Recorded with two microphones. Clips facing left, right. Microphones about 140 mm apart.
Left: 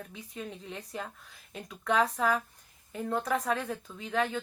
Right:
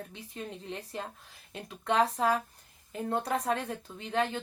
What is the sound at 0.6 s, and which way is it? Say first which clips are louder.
Speech: right 1 dB; 30° right (ahead or behind).